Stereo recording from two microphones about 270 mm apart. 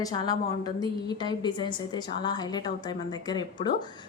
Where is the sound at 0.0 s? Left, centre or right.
Centre.